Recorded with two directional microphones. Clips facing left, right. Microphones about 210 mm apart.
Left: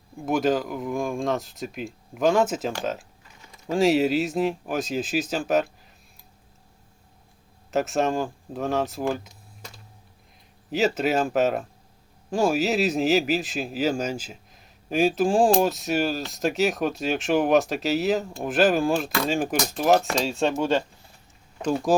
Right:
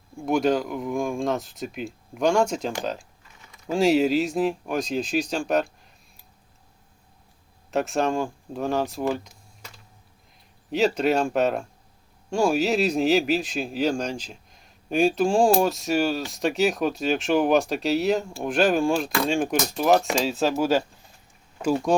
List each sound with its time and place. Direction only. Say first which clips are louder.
0.2 s a man's voice: right 1 dB; centre (ahead or behind)
7.7 s a man's voice: even; centre (ahead or behind)
10.7 s a man's voice: right 1 dB; centre (ahead or behind)